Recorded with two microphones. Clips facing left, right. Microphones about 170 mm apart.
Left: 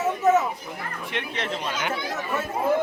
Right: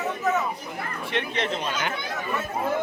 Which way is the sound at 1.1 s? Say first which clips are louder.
Right 3 dB; 5° left (ahead or behind).